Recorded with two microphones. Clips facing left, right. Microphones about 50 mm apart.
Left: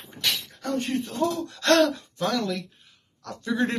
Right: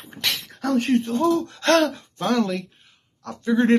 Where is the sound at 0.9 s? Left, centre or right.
Right.